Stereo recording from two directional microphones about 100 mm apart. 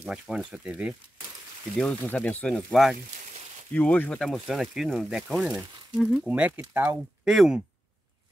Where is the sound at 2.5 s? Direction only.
Centre (ahead or behind).